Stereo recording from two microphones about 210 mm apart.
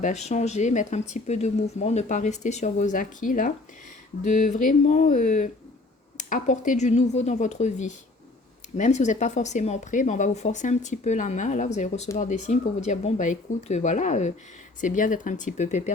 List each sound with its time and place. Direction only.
0.0 s speech: 30° left (ahead or behind)